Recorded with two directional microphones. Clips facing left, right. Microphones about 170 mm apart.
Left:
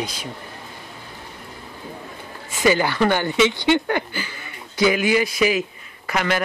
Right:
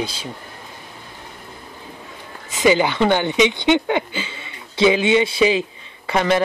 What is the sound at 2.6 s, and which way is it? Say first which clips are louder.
Speech: right 2 dB; 20° right (ahead or behind).